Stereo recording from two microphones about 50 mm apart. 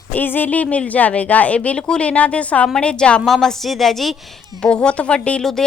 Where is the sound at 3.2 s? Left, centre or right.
Centre.